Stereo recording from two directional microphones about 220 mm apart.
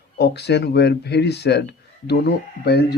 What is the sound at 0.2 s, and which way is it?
Speech, 50° left (ahead or behind).